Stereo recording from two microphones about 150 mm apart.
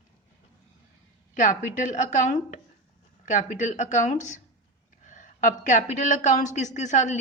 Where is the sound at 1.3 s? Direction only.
55° left (ahead or behind).